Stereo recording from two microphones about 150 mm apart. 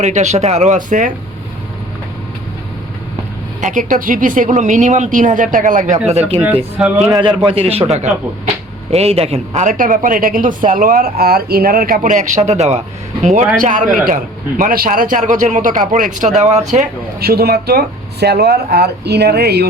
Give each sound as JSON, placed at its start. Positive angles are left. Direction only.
{"t": 0.0, "sound": "speech", "side_deg": -50}
{"t": 3.6, "sound": "speech", "side_deg": -55}
{"t": 6.1, "sound": "speech", "side_deg": -45}
{"t": 6.4, "sound": "speech", "side_deg": -10}
{"t": 7.1, "sound": "a man's voice", "side_deg": -35}
{"t": 17.2, "sound": "speech", "side_deg": -90}